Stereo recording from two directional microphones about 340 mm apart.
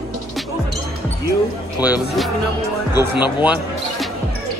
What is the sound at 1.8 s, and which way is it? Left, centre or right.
Speech, centre.